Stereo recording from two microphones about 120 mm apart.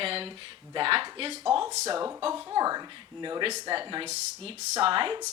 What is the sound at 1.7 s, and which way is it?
Speech, 70° right (ahead or behind).